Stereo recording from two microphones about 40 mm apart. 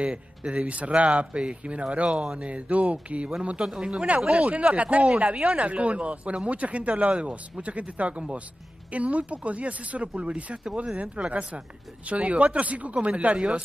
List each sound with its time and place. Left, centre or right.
0.0 s speech: right
3.6 s speech: centre
4.1 s speech: right